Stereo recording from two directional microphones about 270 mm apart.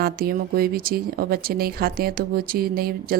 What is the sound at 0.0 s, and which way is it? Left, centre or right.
Speech, right.